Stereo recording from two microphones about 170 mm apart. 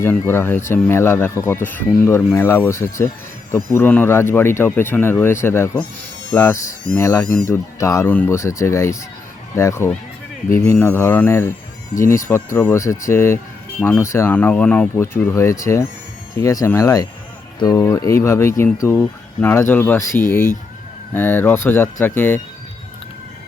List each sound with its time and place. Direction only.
0.0 s speech: 15° left (ahead or behind)